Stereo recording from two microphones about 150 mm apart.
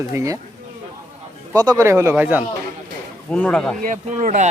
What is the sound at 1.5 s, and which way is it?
Speech, 25° right (ahead or behind).